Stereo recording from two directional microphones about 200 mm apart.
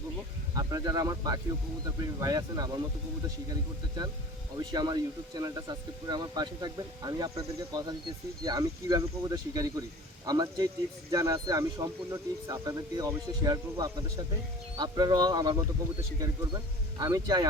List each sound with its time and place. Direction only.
0.5 s speech: 20° right (ahead or behind)